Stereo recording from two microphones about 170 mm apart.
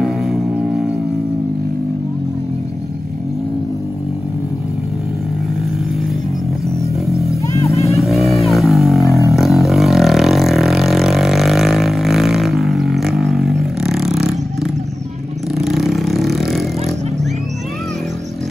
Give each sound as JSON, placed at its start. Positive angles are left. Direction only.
{"t": 0.0, "sound": "music", "side_deg": 0}
{"t": 7.4, "sound": "music", "side_deg": 20}
{"t": 7.9, "sound": "vehicle", "side_deg": 0}